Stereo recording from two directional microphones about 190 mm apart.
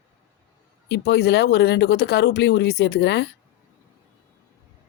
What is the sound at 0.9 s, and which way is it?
Speech, 60° left (ahead or behind).